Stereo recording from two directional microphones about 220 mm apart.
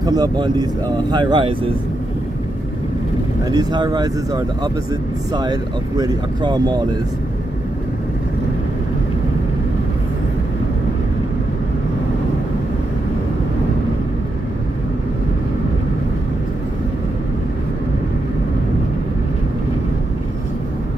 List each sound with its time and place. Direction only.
0.0 s speech: 15° right (ahead or behind)
3.4 s speech: 20° right (ahead or behind)